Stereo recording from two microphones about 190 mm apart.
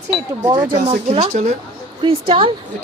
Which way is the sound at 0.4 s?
30° right (ahead or behind).